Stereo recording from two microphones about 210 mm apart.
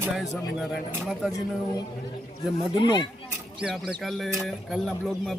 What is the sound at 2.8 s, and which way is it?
Speech, 20° left (ahead or behind).